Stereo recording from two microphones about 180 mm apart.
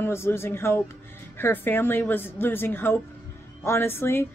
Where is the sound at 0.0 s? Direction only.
15° left (ahead or behind).